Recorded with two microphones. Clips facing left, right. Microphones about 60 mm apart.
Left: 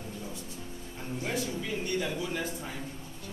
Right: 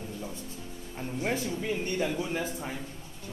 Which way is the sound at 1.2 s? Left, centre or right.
Right.